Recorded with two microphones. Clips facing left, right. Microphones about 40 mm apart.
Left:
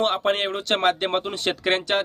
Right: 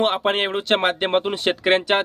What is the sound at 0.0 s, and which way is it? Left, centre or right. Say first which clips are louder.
Speech: right 2 dB; centre.